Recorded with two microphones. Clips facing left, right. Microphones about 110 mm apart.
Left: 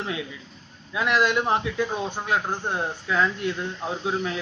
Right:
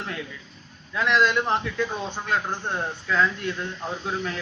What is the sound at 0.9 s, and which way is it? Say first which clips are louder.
A man's voice: even; 10° left (ahead or behind).